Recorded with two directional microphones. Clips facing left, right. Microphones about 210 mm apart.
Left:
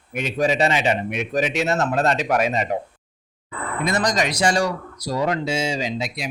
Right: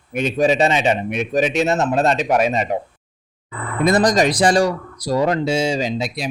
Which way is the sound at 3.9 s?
35° right (ahead or behind).